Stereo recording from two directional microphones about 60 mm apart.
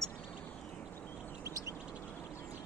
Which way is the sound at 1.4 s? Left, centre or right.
Right.